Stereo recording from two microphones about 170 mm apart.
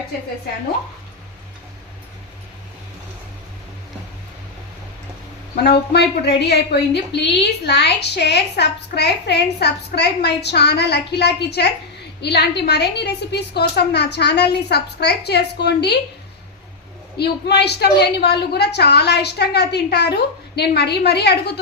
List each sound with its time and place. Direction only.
5.6 s a woman's voice: 75° left (ahead or behind)
17.2 s a woman's voice: 75° left (ahead or behind)